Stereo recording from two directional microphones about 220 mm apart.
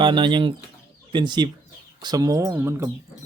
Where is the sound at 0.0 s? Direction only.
20° right (ahead or behind).